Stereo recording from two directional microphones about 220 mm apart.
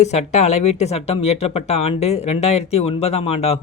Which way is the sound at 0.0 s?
30° left (ahead or behind).